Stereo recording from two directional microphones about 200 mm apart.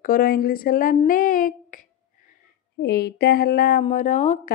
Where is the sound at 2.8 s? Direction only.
55° left (ahead or behind); by 4.5 s 35° left (ahead or behind).